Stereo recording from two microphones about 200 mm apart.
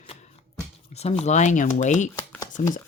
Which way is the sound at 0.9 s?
30° left (ahead or behind).